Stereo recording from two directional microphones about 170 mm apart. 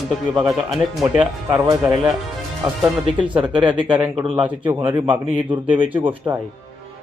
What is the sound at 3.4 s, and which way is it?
Speech, 30° right (ahead or behind).